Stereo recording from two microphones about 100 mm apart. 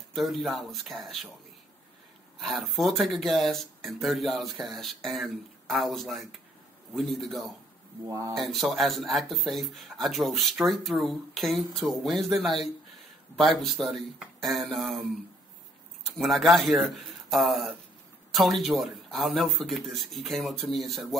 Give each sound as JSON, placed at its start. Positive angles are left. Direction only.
{"t": 0.1, "sound": "speech", "side_deg": 0}
{"t": 2.4, "sound": "speech", "side_deg": 0}
{"t": 8.1, "sound": "speech", "side_deg": -35}
{"t": 8.4, "sound": "speech", "side_deg": 0}
{"t": 16.2, "sound": "speech", "side_deg": 0}